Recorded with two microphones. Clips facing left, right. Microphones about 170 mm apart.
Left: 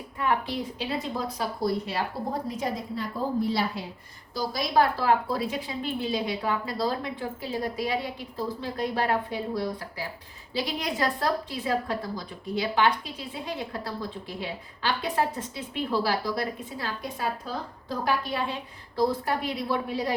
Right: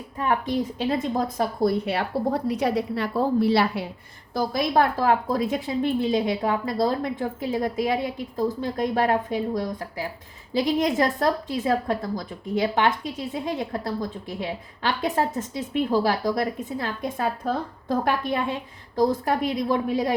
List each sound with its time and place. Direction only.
0.8 s speech: 50° right (ahead or behind); by 3.8 s 70° right (ahead or behind)
4.4 s a woman's voice: 50° right (ahead or behind)